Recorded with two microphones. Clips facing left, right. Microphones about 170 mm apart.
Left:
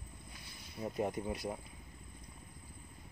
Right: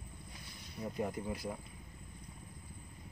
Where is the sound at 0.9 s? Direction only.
25° left (ahead or behind).